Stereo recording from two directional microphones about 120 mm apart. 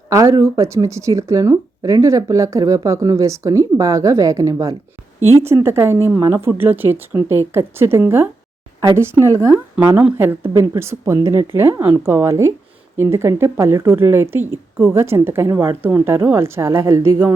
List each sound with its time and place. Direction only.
0.1 s speech: 25° right (ahead or behind)
9.7 s speech: 10° right (ahead or behind)